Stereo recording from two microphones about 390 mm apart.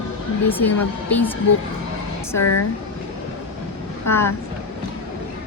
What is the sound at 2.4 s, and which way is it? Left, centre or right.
Speech, left.